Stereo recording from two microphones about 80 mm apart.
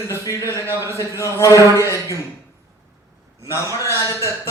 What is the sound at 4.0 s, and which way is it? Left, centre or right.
Speech, left.